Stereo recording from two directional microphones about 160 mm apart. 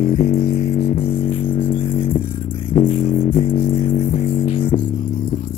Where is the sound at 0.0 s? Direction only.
40° left (ahead or behind).